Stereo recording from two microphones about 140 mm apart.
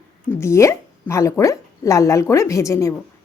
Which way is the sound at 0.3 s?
20° left (ahead or behind).